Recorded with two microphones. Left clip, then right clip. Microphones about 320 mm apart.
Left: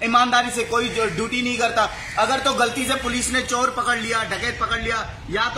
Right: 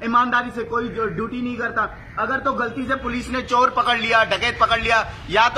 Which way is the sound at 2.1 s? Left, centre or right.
Left.